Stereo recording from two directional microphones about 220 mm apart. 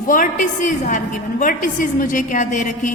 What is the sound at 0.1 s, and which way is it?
A woman's voice, 35° left (ahead or behind).